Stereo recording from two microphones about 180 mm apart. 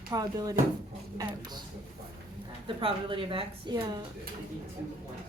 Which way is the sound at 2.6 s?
30° right (ahead or behind).